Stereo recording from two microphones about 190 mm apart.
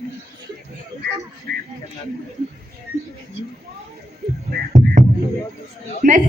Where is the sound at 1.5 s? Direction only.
55° right (ahead or behind).